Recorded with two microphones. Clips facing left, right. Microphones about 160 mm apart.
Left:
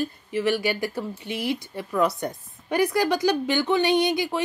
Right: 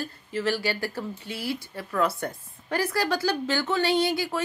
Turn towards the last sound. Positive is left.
turn(degrees=20)  # may be behind; listen again after turning